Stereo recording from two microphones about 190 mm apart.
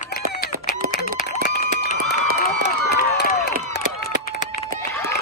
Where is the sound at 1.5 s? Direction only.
50° left (ahead or behind).